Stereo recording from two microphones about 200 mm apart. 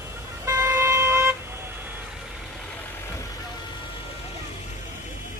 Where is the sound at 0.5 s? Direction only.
15° right (ahead or behind).